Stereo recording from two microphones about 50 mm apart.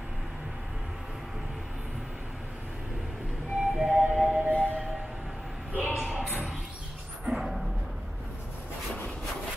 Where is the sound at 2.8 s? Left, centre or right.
Centre.